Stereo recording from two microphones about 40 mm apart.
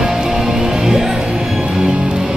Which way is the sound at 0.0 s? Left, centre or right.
Centre.